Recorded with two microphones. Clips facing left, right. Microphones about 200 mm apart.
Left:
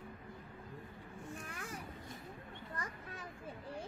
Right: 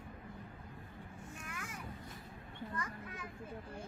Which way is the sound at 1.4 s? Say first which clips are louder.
Left 1 dB; 35° left (ahead or behind).